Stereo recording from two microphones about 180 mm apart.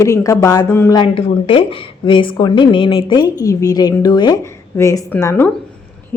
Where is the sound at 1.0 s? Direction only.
30° left (ahead or behind).